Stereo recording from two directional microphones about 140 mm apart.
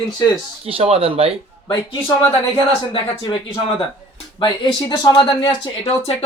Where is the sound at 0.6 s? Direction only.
45° right (ahead or behind).